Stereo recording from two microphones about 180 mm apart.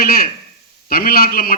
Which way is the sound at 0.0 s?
55° left (ahead or behind).